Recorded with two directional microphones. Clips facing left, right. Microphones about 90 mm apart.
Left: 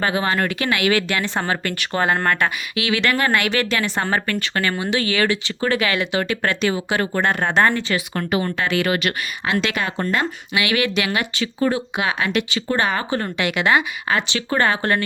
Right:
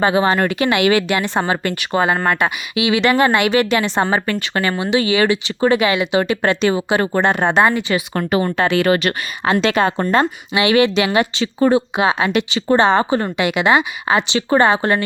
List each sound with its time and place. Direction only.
0.0 s speech: 20° right (ahead or behind)
8.3 s speech: 35° right (ahead or behind); by 15.0 s 20° right (ahead or behind)